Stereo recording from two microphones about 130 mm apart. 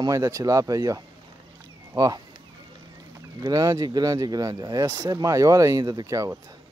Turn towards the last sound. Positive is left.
turn(degrees=-25)  # may be behind; listen again after turning